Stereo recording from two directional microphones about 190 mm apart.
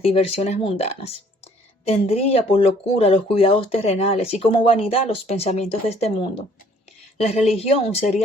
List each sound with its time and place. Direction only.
0.0 s speech: 30° left (ahead or behind)
7.5 s speech: 35° left (ahead or behind)